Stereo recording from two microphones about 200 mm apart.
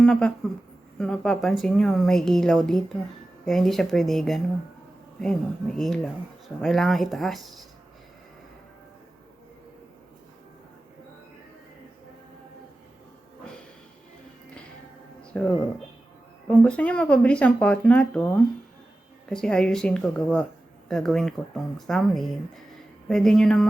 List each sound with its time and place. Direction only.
0.0 s speech: 5° left (ahead or behind)
15.3 s speech: 5° left (ahead or behind)